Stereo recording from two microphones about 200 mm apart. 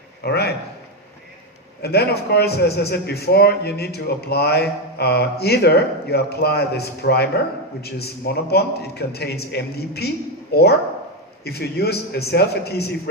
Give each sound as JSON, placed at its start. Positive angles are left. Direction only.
{"t": 0.2, "sound": "a man's voice", "side_deg": 55}
{"t": 1.8, "sound": "a man's voice", "side_deg": 55}